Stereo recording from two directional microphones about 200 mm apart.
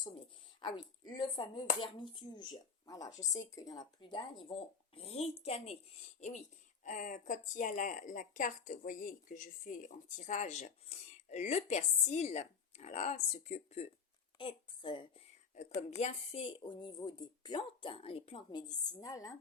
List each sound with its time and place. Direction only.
0.6 s a woman's voice: 20° left (ahead or behind)